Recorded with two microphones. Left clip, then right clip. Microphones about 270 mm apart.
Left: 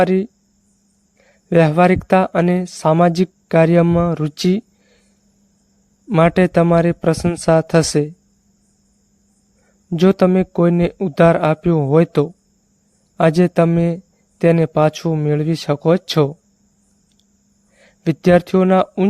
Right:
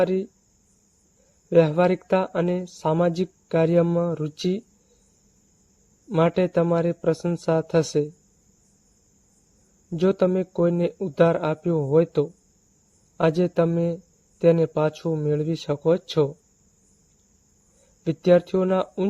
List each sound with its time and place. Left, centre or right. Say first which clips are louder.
0.0 s speech: left 7 dB; left
1.5 s speech: left 5 dB; left
6.1 s speech: left 7 dB; left
9.9 s speech: left 7 dB; left
18.0 s speech: left 5 dB; left